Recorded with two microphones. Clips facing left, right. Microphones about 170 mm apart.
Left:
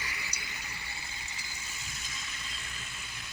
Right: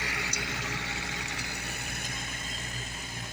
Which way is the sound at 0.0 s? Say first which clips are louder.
Right 8 dB; 75° right (ahead or behind).